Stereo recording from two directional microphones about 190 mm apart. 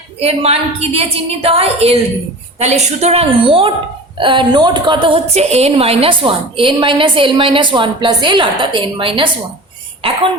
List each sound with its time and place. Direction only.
0.2 s a woman's voice: 30° right (ahead or behind)